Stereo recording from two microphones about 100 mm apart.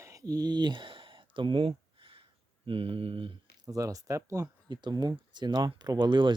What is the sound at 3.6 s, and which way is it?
Speech, 35° right (ahead or behind).